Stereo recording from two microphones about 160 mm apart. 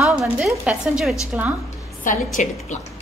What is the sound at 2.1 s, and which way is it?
Speech, 55° left (ahead or behind).